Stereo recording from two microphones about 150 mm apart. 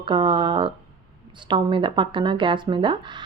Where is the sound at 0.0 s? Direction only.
30° right (ahead or behind).